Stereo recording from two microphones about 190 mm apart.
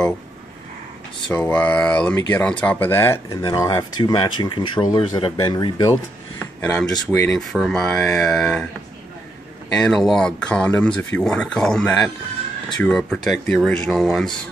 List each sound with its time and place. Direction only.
1.3 s speech: 5° left (ahead or behind)
6.4 s a sound: 10° left (ahead or behind)
6.9 s speech: 15° left (ahead or behind)
7.2 s speech: centre (ahead or behind)
9.7 s speech: 5° left (ahead or behind)